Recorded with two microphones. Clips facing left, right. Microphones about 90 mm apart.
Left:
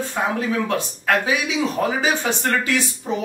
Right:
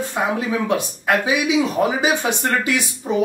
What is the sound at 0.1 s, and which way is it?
Speech, 10° right (ahead or behind).